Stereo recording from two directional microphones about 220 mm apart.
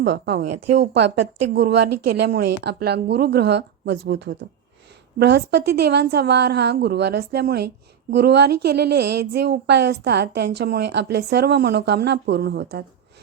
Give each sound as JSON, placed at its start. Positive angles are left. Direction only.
{"t": 0.0, "sound": "a woman's voice", "side_deg": -50}
{"t": 1.5, "sound": "a woman's voice", "side_deg": -50}